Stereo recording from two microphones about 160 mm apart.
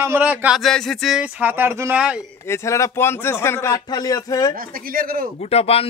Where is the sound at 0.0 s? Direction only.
10° right (ahead or behind).